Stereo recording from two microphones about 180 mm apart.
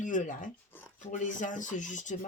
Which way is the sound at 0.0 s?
45° left (ahead or behind).